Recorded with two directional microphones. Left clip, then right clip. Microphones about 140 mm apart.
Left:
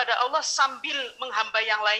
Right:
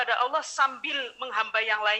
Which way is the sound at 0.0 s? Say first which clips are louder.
Left 2 dB; 25° right (ahead or behind).